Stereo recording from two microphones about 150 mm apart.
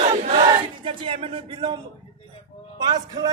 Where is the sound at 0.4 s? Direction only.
30° right (ahead or behind).